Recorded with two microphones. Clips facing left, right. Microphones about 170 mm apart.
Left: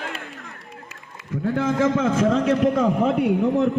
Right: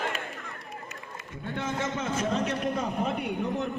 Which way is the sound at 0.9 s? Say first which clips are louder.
Left 9 dB; 90° left.